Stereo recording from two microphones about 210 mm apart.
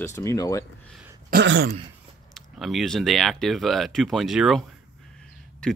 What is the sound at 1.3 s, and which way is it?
Throat clearing, 55° right (ahead or behind).